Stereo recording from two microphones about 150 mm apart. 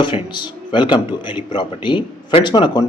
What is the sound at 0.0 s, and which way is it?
Speech, 30° left (ahead or behind).